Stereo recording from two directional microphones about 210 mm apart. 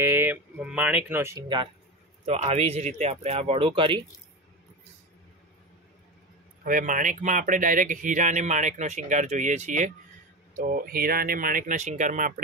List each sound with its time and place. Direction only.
0.0 s speech: 10° right (ahead or behind)
2.2 s speech: 30° right (ahead or behind)
6.6 s speech: 40° right (ahead or behind)